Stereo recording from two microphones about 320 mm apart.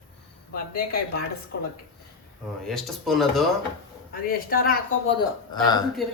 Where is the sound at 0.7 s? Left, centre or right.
Left.